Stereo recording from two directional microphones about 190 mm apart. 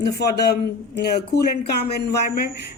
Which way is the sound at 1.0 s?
60° left (ahead or behind).